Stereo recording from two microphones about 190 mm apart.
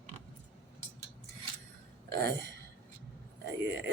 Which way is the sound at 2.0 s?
60° right (ahead or behind).